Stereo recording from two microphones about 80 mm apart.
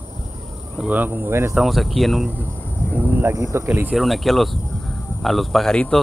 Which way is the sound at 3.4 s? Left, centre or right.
Right.